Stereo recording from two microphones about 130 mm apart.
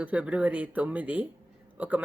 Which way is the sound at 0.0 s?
10° right (ahead or behind).